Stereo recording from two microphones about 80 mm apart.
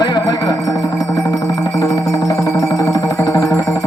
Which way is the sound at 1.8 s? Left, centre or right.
Left.